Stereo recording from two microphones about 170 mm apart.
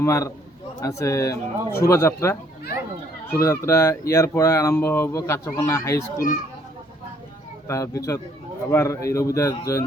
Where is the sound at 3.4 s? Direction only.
15° left (ahead or behind).